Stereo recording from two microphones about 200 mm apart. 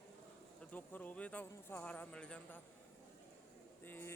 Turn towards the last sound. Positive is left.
turn(degrees=10)  # may be behind; listen again after turning